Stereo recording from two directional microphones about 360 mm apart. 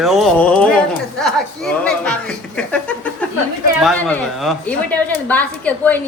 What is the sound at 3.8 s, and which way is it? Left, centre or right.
Speech, centre.